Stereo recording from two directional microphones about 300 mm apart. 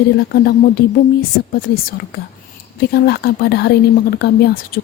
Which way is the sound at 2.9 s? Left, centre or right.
Left.